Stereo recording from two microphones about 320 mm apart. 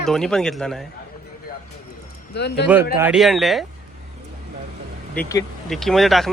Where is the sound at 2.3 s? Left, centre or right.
Left.